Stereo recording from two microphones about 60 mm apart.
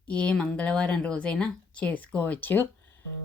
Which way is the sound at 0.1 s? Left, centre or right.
Centre.